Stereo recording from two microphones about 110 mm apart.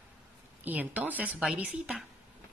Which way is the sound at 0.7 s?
15° right (ahead or behind).